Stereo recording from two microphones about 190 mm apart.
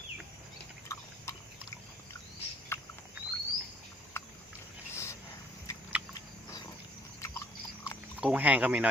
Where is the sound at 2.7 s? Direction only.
10° left (ahead or behind).